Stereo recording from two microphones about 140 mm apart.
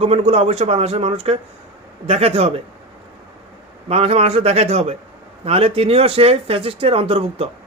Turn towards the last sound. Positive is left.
turn(degrees=-45)  # may be behind; listen again after turning